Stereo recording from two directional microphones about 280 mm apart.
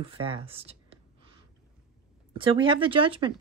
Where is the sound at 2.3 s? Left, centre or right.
Centre.